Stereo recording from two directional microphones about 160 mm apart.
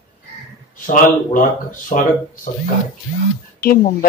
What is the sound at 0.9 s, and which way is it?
Speech, 55° left (ahead or behind).